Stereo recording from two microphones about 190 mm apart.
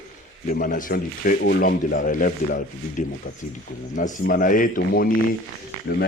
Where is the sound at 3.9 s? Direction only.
45° left (ahead or behind).